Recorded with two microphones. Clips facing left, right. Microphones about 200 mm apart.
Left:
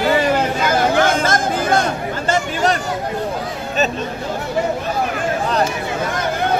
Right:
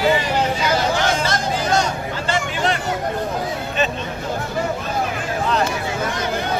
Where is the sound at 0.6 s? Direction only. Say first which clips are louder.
Left 4 dB; 55° left (ahead or behind).